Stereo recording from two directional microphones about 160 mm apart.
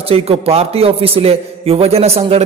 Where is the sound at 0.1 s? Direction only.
40° right (ahead or behind).